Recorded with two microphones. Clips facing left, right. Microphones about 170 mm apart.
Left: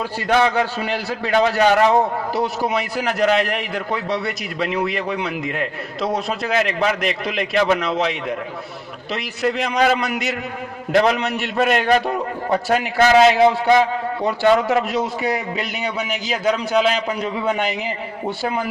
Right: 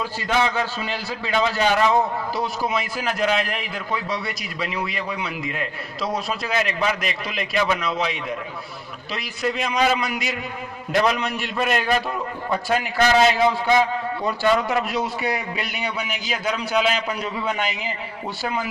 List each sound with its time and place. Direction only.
0.0 s a man's voice: 60° left (ahead or behind)
11.9 s a man's voice: 40° left (ahead or behind)
12.6 s a man's voice: 55° left (ahead or behind)